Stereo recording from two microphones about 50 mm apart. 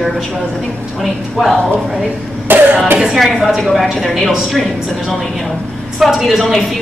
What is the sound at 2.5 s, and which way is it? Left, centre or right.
Speech, right.